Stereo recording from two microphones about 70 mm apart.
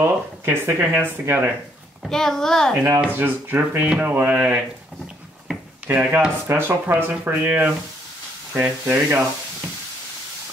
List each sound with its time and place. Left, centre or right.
0.0 s speech: right
2.0 s a child's voice: centre
3.0 s speech: right
5.9 s speech: centre
6.4 s speech: right